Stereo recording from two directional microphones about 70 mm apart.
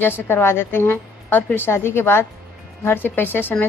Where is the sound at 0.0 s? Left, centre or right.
Left.